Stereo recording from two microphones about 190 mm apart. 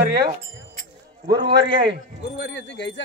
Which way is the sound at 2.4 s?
65° left (ahead or behind).